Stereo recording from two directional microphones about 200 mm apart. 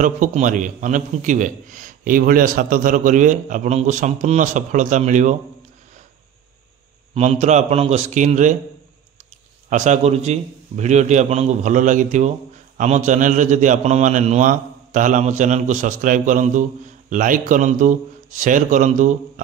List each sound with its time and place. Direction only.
0.0 s a man's voice: 40° right (ahead or behind)
7.2 s a man's voice: 35° right (ahead or behind)
9.7 s a man's voice: 35° right (ahead or behind)